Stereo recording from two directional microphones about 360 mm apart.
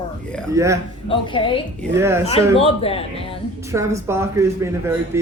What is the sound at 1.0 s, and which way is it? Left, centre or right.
Speech, centre.